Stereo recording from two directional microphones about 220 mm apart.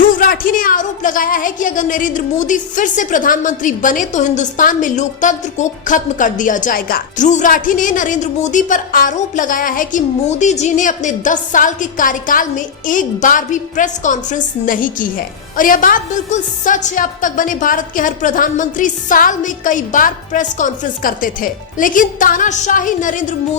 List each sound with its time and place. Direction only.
0.0 s a woman's voice: 40° left (ahead or behind)